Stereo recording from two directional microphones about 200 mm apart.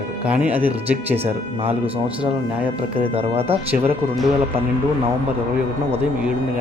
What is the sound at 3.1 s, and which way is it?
Speech, 30° right (ahead or behind).